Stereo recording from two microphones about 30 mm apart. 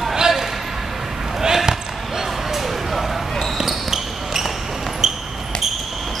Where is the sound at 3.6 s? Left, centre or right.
Centre.